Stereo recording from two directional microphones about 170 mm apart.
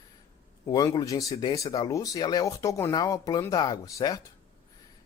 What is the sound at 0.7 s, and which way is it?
Speech, 20° left (ahead or behind).